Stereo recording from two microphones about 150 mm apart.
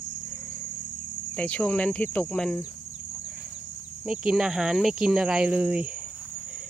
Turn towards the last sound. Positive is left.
turn(degrees=-10)  # may be behind; listen again after turning